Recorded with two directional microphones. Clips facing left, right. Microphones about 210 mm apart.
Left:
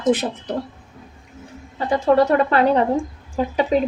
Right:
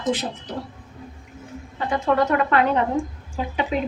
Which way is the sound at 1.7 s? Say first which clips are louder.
Left 5 dB; 35° left (ahead or behind).